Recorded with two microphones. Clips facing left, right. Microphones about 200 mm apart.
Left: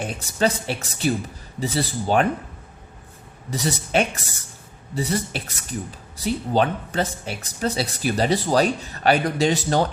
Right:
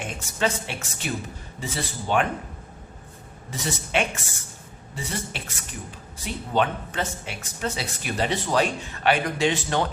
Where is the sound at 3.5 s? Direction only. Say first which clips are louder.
Left 4 dB; 40° left (ahead or behind).